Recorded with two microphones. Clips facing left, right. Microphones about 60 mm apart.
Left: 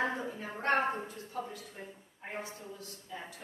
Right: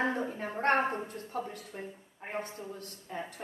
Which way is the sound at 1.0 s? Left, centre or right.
Right.